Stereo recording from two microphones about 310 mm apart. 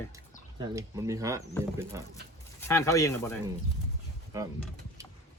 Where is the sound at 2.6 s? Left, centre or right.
Centre.